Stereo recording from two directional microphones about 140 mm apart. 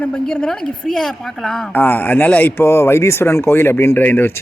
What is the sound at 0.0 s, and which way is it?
Speech, 10° left (ahead or behind).